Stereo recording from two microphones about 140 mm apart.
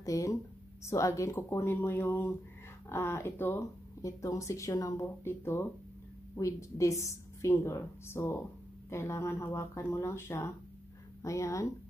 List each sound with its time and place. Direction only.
0.0 s speech: 25° left (ahead or behind)